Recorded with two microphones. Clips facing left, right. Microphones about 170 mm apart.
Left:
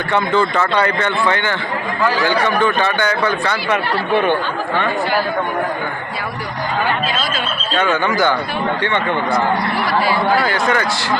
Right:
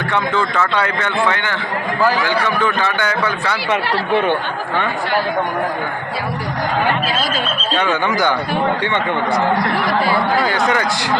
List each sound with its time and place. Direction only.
0.1 s a man's voice: centre (ahead or behind)
2.8 s a man's voice: 5° right (ahead or behind)
8.0 s speech: 15° right (ahead or behind)
10.3 s speech: 20° right (ahead or behind)